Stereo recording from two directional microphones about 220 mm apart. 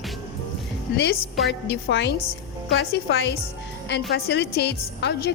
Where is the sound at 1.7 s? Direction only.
50° left (ahead or behind).